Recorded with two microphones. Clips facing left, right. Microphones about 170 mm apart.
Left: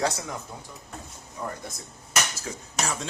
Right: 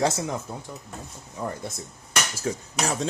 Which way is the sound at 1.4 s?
20° right (ahead or behind).